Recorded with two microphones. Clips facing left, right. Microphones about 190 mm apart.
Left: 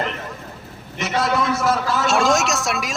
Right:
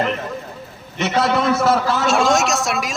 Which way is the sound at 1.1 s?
60° right (ahead or behind).